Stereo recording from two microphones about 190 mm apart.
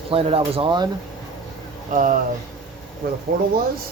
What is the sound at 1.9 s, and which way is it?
Speech, 45° right (ahead or behind).